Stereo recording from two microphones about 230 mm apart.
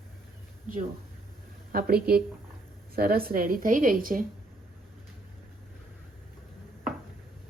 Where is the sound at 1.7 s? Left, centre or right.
Right.